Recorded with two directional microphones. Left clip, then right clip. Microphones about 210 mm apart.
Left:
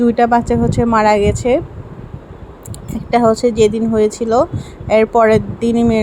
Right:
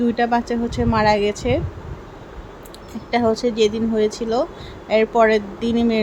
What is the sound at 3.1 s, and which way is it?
A woman's voice, 15° left (ahead or behind).